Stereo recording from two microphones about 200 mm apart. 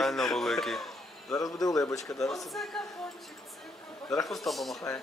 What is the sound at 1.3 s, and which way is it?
Speech, 20° left (ahead or behind).